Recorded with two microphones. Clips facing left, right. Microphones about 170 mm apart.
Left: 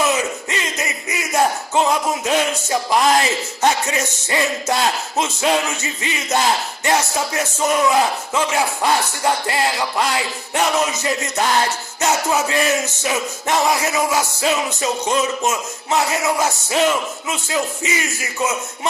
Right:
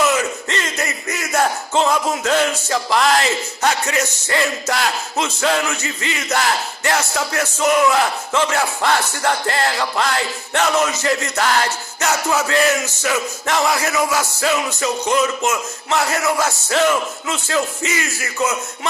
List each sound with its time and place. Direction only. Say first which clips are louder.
0.5 s music: right 1 dB; 15° left (ahead or behind)